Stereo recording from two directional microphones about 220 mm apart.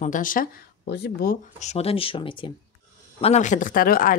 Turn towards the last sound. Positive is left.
turn(degrees=40)  # may be behind; listen again after turning